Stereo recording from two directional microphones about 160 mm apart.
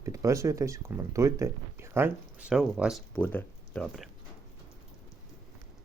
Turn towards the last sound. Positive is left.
turn(degrees=5)  # may be behind; listen again after turning